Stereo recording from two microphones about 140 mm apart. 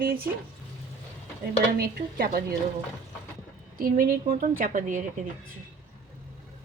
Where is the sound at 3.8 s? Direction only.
85° right; by 5.0 s 65° right (ahead or behind).